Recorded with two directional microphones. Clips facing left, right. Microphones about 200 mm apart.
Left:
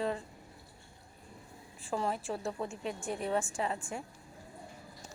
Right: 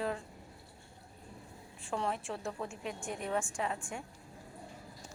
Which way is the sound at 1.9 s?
5° left (ahead or behind).